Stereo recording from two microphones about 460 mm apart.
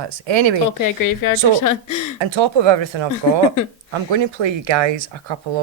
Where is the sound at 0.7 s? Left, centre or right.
Left.